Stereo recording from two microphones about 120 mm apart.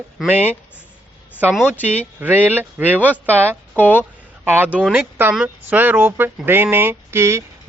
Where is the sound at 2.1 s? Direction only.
15° right (ahead or behind).